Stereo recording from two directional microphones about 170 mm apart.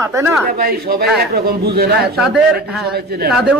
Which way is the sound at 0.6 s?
65° right (ahead or behind).